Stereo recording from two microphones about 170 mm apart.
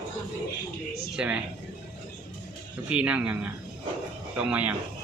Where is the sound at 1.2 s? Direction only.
5° right (ahead or behind).